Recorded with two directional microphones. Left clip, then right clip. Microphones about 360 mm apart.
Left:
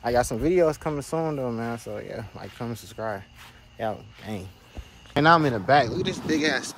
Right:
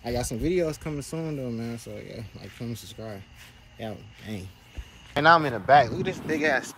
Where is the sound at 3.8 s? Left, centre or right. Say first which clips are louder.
Left 8 dB; centre.